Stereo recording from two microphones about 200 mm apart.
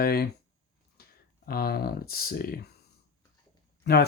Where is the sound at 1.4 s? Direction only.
50° left (ahead or behind).